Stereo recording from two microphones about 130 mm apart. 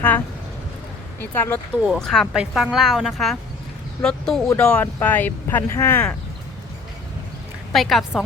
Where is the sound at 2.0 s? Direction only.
5° left (ahead or behind).